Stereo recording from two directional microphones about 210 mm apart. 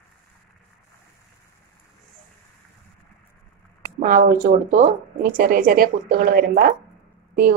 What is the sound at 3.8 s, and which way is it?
A woman's voice, 40° right (ahead or behind).